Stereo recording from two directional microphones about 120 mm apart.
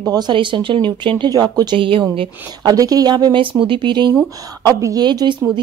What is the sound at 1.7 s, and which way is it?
Speech, 45° right (ahead or behind).